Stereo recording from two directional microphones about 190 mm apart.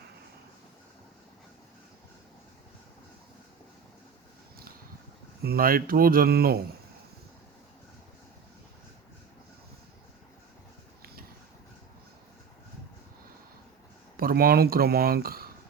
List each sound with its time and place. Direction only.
5.4 s speech: 55° right (ahead or behind)
11.0 s a sound: 50° right (ahead or behind)
14.2 s speech: 50° right (ahead or behind)